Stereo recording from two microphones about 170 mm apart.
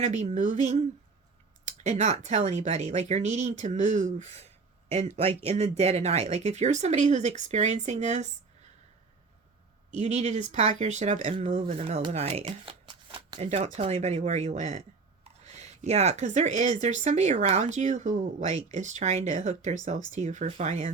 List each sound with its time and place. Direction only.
0.0 s speech: 45° right (ahead or behind)
9.9 s speech: 40° right (ahead or behind)